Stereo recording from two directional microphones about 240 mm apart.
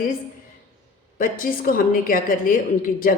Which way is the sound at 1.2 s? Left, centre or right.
Left.